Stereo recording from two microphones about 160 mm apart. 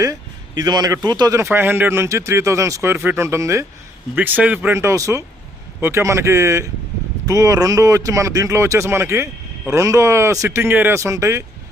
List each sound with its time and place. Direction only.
0.0 s speech: 20° right (ahead or behind)